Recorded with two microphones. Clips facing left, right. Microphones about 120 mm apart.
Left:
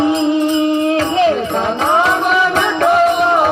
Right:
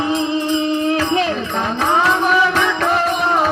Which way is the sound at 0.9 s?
20° left (ahead or behind).